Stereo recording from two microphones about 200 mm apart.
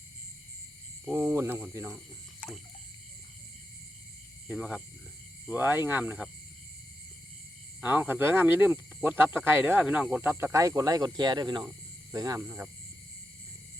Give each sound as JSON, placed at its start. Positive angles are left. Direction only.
{"t": 1.0, "sound": "speech", "side_deg": -10}
{"t": 4.4, "sound": "speech", "side_deg": -5}
{"t": 7.8, "sound": "speech", "side_deg": -10}